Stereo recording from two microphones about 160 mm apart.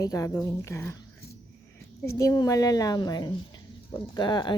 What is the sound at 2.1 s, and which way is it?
Speech, 20° left (ahead or behind).